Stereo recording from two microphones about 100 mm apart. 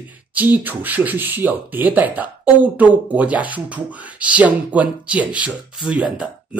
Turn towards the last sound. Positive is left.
turn(degrees=-10)  # may be behind; listen again after turning